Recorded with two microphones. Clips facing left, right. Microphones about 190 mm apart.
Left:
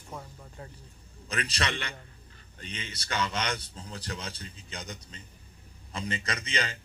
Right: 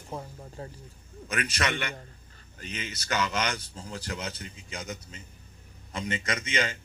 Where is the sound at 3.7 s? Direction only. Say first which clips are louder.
Right 3 dB; 30° right (ahead or behind).